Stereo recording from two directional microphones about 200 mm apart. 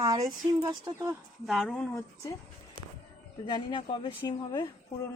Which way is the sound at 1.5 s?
5° left (ahead or behind).